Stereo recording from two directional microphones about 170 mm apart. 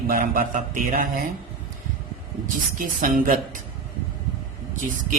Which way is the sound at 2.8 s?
55° right (ahead or behind).